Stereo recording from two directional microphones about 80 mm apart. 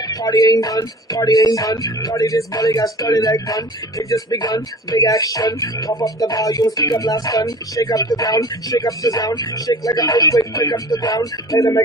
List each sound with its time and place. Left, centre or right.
0.1 s speech: left